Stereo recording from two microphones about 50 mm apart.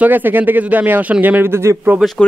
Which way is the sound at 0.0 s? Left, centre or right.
Right.